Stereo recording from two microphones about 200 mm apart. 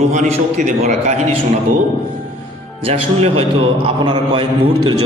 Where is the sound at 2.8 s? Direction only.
30° right (ahead or behind).